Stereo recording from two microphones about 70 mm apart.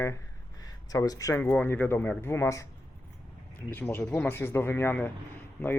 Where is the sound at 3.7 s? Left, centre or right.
Left.